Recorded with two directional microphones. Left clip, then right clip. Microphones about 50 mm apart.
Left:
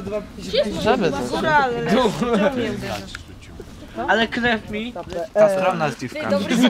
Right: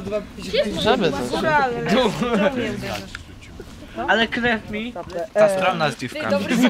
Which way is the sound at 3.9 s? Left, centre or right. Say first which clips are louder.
Even; centre.